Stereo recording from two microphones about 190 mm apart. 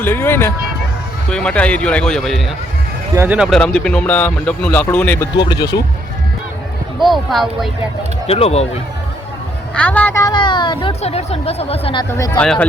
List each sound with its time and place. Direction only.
0.0 s speech: 10° left (ahead or behind)
5.4 s a woman's voice: 20° left (ahead or behind)
7.0 s speech: centre (ahead or behind)
8.3 s speech: 35° left (ahead or behind)
9.7 s a woman's voice: 5° left (ahead or behind); by 12.0 s 30° left (ahead or behind)
12.1 s speech: 20° left (ahead or behind)
12.4 s speech: 5° left (ahead or behind)